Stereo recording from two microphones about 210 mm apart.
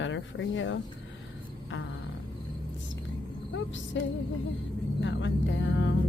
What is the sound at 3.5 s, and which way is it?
Speech, 65° left (ahead or behind).